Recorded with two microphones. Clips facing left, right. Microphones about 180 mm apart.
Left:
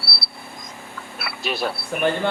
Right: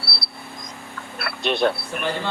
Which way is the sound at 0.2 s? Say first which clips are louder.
Even; 5° left (ahead or behind).